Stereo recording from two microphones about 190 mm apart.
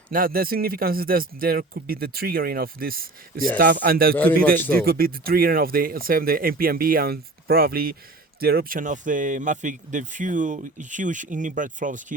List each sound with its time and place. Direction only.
0.1 s speech: 50° right (ahead or behind)
4.1 s a man's voice: 10° left (ahead or behind)
4.4 s speech: 50° right (ahead or behind)